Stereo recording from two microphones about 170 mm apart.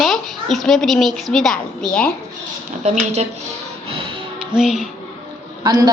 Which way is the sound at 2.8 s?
40° right (ahead or behind).